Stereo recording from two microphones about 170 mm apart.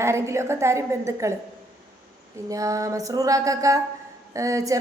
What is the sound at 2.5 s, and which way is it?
A woman's voice, 20° right (ahead or behind).